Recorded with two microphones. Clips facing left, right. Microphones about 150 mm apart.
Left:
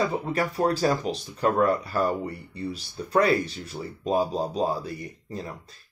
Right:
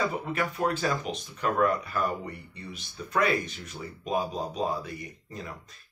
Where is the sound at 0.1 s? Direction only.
35° left (ahead or behind).